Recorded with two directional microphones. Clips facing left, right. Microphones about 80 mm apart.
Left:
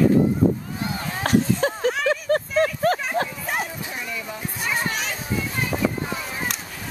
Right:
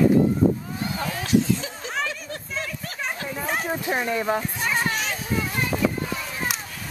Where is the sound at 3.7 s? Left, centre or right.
Right.